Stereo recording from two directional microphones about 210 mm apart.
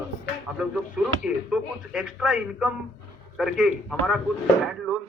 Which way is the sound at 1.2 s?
5° right (ahead or behind).